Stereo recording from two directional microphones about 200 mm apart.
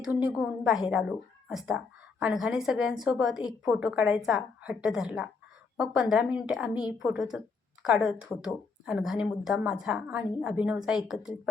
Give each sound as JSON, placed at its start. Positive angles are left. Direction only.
{"t": 0.3, "sound": "a woman's voice", "side_deg": -5}